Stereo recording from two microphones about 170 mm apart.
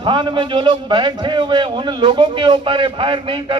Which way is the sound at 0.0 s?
30° right (ahead or behind).